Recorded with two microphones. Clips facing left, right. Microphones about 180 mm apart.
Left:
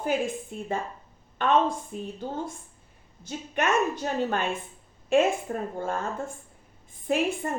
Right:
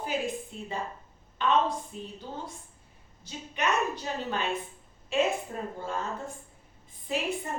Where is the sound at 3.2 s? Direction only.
50° left (ahead or behind).